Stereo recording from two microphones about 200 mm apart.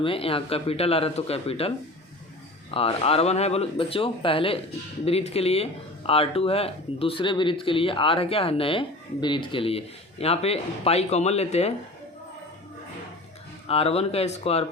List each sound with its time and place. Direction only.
0.0 s speech: 25° left (ahead or behind)
13.7 s speech: 30° left (ahead or behind)